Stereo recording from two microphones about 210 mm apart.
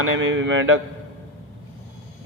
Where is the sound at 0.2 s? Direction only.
65° right (ahead or behind).